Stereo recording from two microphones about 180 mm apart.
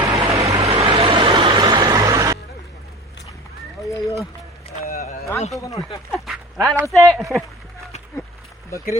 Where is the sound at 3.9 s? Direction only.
15° left (ahead or behind).